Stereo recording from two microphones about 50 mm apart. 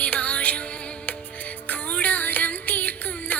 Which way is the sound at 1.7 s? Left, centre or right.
Left.